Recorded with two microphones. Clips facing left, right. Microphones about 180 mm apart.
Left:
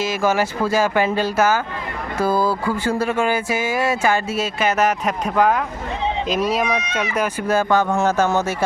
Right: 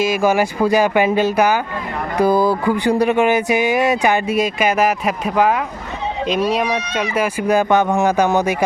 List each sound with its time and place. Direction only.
0.0 s speech: 15° right (ahead or behind)